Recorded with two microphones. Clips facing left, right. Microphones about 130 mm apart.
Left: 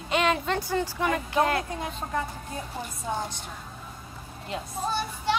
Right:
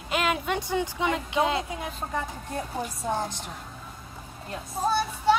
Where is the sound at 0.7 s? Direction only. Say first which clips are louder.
Even; 15° right (ahead or behind).